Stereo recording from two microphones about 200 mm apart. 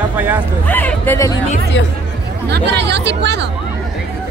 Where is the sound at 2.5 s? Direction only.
60° right (ahead or behind).